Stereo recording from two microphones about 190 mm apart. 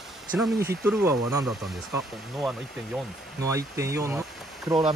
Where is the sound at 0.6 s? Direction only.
15° right (ahead or behind).